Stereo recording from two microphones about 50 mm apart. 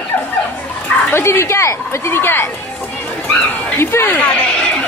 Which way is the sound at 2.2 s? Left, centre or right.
Left.